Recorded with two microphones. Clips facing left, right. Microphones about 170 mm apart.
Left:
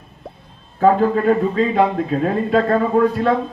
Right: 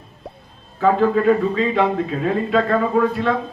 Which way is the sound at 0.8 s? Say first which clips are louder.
Left 2 dB; 40° left (ahead or behind).